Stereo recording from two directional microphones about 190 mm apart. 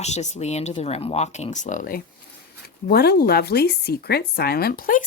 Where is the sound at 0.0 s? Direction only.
35° left (ahead or behind).